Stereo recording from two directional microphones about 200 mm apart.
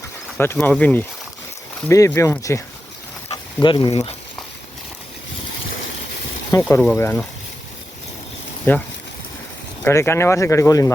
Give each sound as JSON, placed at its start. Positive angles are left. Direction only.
{"t": 0.3, "sound": "speech", "side_deg": 10}
{"t": 6.7, "sound": "speech", "side_deg": 10}
{"t": 8.7, "sound": "speech", "side_deg": 10}
{"t": 9.8, "sound": "speech", "side_deg": 15}